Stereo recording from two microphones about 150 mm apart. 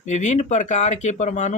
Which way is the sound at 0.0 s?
50° left (ahead or behind).